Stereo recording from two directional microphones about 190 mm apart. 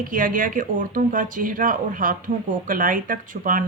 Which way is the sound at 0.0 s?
45° right (ahead or behind).